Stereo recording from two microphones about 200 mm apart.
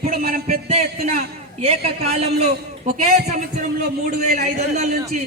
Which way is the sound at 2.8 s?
35° right (ahead or behind).